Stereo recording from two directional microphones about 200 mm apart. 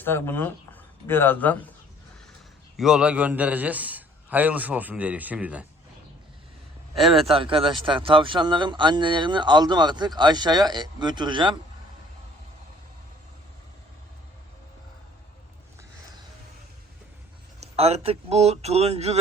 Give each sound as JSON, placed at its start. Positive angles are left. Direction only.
{"t": 0.0, "sound": "speech", "side_deg": 10}
{"t": 2.7, "sound": "a man's voice", "side_deg": -5}
{"t": 7.0, "sound": "speech", "side_deg": 0}
{"t": 7.3, "sound": "speech", "side_deg": -25}
{"t": 17.6, "sound": "speech", "side_deg": -30}